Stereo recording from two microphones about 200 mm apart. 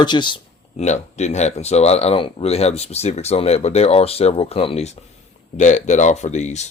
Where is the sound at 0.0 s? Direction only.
25° left (ahead or behind).